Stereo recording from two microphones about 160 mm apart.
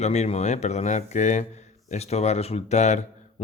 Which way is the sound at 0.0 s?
45° left (ahead or behind).